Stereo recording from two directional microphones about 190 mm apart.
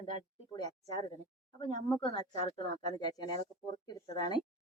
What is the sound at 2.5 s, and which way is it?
Speech, 20° left (ahead or behind).